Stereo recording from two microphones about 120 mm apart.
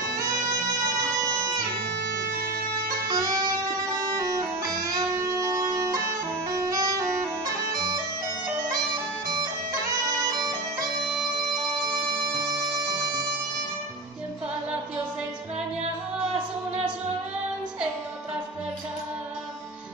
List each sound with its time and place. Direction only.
3.1 s music: 30° right (ahead or behind)